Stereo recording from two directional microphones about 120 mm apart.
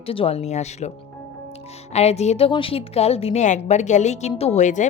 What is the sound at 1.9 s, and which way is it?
A woman's voice, 65° left (ahead or behind).